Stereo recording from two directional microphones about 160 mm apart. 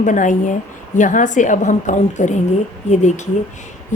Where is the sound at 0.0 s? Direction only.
50° left (ahead or behind).